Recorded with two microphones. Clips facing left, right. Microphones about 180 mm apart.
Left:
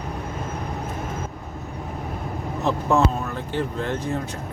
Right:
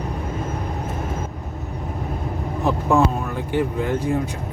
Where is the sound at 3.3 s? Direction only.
10° right (ahead or behind).